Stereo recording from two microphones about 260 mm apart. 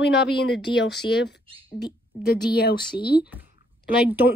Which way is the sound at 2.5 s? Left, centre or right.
Left.